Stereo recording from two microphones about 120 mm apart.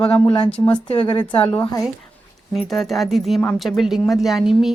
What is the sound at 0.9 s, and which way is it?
Speech, 40° left (ahead or behind).